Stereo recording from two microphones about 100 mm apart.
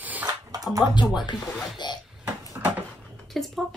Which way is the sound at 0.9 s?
50° left (ahead or behind).